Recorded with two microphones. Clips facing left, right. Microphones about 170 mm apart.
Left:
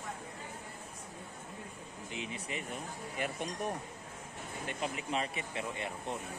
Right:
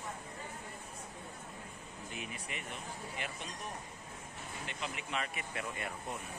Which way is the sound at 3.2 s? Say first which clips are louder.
Left 11 dB; 50° left (ahead or behind).